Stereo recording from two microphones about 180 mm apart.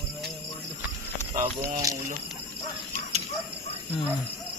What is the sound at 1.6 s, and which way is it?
Speech, 20° right (ahead or behind).